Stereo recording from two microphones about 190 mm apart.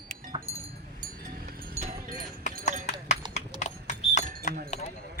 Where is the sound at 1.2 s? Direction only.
50° right (ahead or behind).